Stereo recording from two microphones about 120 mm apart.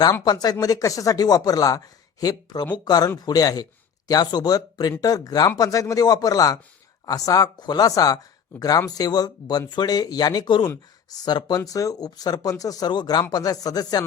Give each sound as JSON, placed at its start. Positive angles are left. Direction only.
{"t": 0.0, "sound": "speech", "side_deg": 35}